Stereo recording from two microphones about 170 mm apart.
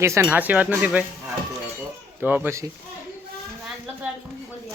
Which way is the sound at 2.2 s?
10° right (ahead or behind).